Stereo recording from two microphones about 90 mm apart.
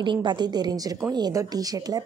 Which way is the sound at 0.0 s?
60° right (ahead or behind).